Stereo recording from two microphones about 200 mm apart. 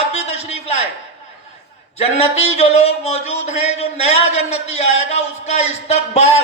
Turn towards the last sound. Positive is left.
turn(degrees=35)  # may be behind; listen again after turning